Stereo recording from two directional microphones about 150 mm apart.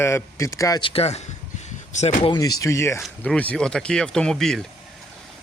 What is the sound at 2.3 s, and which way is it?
Speech, 25° left (ahead or behind).